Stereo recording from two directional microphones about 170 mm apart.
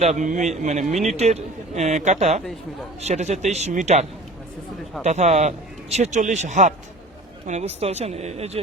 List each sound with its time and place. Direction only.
0.0 s a man's voice: 45° right (ahead or behind)
5.0 s a man's voice: 40° right (ahead or behind)